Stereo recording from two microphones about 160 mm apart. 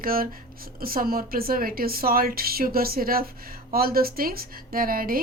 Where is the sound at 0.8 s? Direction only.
65° right (ahead or behind).